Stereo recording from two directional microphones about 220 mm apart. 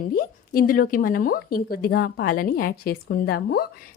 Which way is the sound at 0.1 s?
40° left (ahead or behind).